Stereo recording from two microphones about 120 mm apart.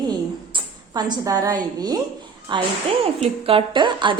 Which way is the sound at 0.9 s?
35° right (ahead or behind).